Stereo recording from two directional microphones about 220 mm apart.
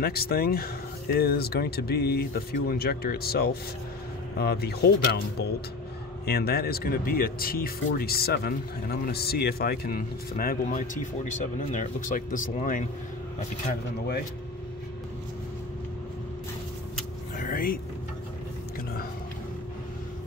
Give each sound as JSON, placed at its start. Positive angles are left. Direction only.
{"t": 0.0, "sound": "speech", "side_deg": 45}
{"t": 17.4, "sound": "music", "side_deg": 40}